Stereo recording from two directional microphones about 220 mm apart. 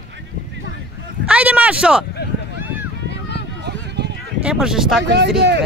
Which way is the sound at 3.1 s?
50° left (ahead or behind).